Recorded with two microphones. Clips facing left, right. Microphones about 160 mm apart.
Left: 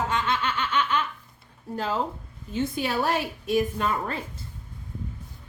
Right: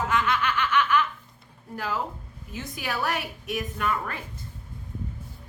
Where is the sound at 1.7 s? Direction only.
25° left (ahead or behind).